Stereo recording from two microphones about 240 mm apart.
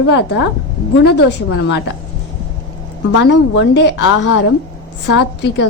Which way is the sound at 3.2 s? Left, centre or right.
Left.